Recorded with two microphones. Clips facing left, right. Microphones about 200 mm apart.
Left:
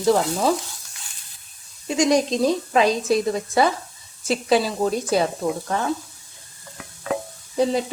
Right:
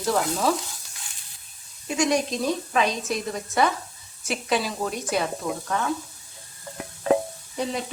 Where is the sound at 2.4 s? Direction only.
35° left (ahead or behind).